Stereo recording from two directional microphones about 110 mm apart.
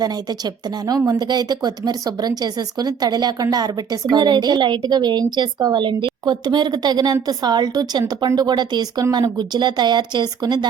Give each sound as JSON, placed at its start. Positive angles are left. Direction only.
{"t": 0.0, "sound": "speech", "side_deg": -40}